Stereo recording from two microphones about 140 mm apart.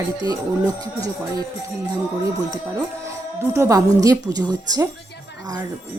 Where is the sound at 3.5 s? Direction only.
20° right (ahead or behind).